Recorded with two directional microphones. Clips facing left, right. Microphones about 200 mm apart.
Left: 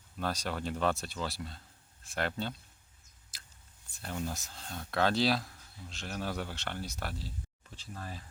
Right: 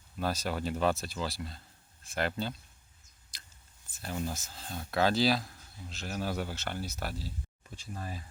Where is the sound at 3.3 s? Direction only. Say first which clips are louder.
Right 1 dB; 5° left (ahead or behind).